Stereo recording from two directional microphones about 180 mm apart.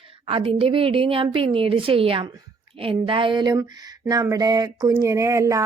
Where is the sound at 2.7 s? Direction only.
30° right (ahead or behind).